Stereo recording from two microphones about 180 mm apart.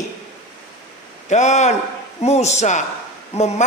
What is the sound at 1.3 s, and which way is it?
Speech, 40° left (ahead or behind).